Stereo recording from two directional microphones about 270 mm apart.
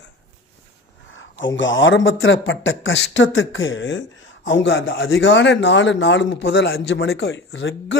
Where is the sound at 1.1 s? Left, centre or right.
Left.